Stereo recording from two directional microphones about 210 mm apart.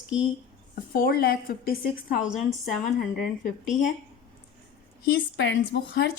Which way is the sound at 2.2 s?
Centre (ahead or behind).